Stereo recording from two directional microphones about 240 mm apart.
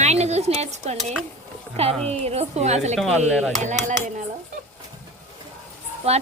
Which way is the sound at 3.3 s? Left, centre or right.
Centre.